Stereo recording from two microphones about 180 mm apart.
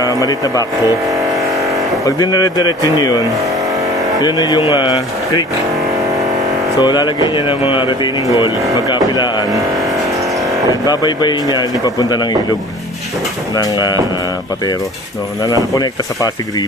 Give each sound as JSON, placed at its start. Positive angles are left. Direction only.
{"t": 0.0, "sound": "music", "side_deg": 20}
{"t": 2.0, "sound": "music", "side_deg": 20}
{"t": 4.2, "sound": "music", "side_deg": 25}
{"t": 6.8, "sound": "music", "side_deg": 25}
{"t": 10.9, "sound": "music", "side_deg": 25}
{"t": 13.6, "sound": "music", "side_deg": 20}
{"t": 15.4, "sound": "music", "side_deg": 20}